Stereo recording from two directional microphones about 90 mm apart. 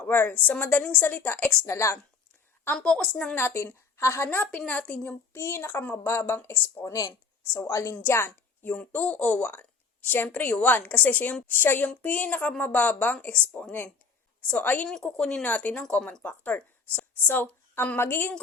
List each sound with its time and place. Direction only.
0.0 s a woman's voice: 20° left (ahead or behind)
1.6 s a woman's voice: 35° left (ahead or behind)
2.7 s speech: 10° left (ahead or behind)
3.3 s a woman's voice: 30° left (ahead or behind)
4.5 s speech: 15° left (ahead or behind)
5.3 s a woman's voice: 30° left (ahead or behind)
6.8 s a woman's voice: 40° left (ahead or behind)
8.6 s a woman's voice: 15° left (ahead or behind)
14.8 s a woman's voice: 5° left (ahead or behind); by 18.3 s 25° left (ahead or behind)